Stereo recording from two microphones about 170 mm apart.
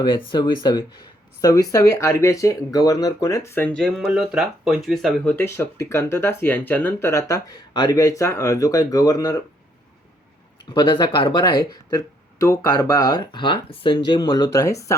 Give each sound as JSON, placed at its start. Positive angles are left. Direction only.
{"t": 0.0, "sound": "speech", "side_deg": 25}
{"t": 10.7, "sound": "speech", "side_deg": 25}